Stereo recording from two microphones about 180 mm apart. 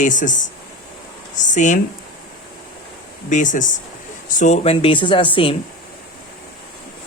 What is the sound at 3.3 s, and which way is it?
Speech, 45° left (ahead or behind).